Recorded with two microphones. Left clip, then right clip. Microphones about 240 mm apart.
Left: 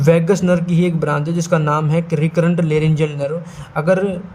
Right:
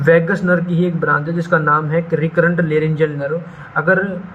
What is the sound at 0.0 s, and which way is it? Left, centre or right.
A man's voice, left.